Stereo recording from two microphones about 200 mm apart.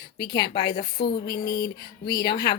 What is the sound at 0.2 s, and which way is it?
Speech, 20° left (ahead or behind).